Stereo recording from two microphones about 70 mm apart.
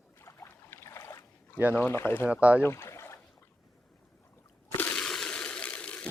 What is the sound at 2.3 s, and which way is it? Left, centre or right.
Speech, right.